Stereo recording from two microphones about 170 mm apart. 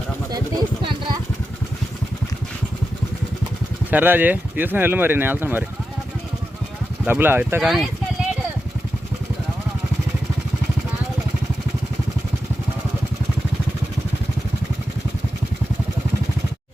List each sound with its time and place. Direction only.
0.3 s a sound: 25° right (ahead or behind)
3.9 s speech: 10° right (ahead or behind)
7.0 s speech: 10° right (ahead or behind)